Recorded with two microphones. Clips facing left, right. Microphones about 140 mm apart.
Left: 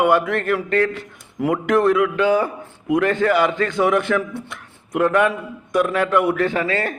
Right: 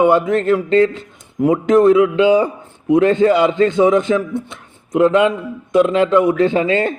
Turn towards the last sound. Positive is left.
turn(degrees=-25)  # may be behind; listen again after turning